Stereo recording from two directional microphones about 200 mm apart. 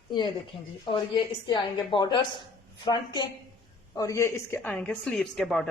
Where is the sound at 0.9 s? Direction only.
25° left (ahead or behind).